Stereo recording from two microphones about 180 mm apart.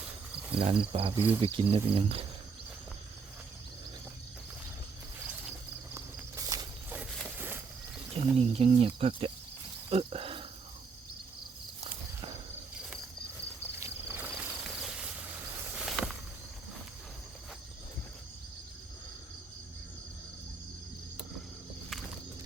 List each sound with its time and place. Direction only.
0.6 s speech: 30° right (ahead or behind)
1.1 s speech: 10° right (ahead or behind)
1.4 s speech: 30° right (ahead or behind)
5.9 s walk: 20° right (ahead or behind)
7.3 s a sound: 10° right (ahead or behind)
8.1 s speech: 35° right (ahead or behind)
11.8 s walk: 25° right (ahead or behind)
13.7 s cricket: 15° right (ahead or behind)
15.8 s a sound: centre (ahead or behind)